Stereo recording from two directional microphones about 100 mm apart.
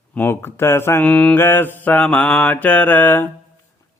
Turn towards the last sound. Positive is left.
turn(degrees=20)  # may be behind; listen again after turning